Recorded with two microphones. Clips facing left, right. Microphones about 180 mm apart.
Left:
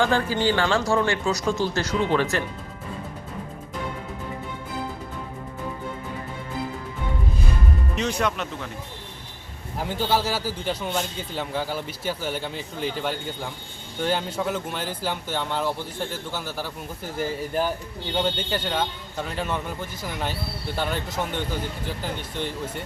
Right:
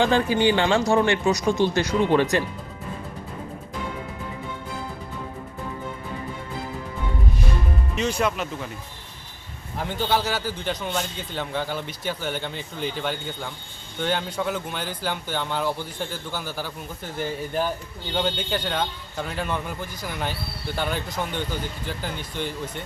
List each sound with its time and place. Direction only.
0.0 s speech: 20° right (ahead or behind)
8.2 s a man's voice: 5° right (ahead or behind)
9.7 s a man's voice: 5° left (ahead or behind)